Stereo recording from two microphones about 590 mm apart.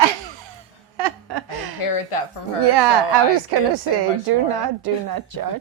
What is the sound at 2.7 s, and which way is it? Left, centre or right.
Speech, right.